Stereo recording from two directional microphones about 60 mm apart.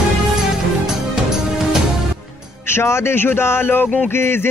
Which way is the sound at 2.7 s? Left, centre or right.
Left.